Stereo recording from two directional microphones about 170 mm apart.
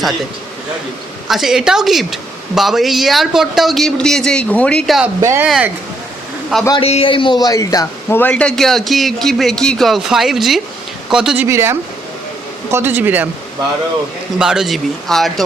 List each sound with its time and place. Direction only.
1.3 s a man's voice: centre (ahead or behind)
5.2 s speech: 15° right (ahead or behind)
5.5 s a man's voice: 5° right (ahead or behind)
6.7 s a man's voice: 35° left (ahead or behind); by 11.4 s 5° right (ahead or behind)
11.4 s speech: 15° right (ahead or behind)
14.3 s a man's voice: 5° right (ahead or behind)